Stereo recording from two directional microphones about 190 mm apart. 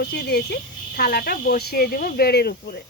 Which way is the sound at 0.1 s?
55° left (ahead or behind).